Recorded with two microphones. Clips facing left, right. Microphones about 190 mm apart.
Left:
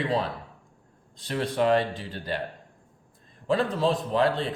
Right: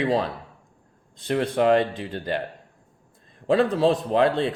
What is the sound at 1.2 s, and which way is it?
Speech, 50° right (ahead or behind).